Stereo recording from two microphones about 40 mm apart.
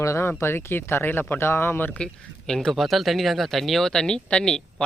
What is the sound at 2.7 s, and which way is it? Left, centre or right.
Speech, centre.